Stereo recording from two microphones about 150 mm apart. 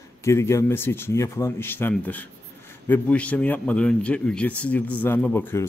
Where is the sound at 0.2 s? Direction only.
20° left (ahead or behind).